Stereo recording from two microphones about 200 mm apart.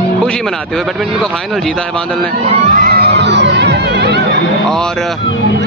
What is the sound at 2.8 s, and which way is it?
Music, 55° right (ahead or behind).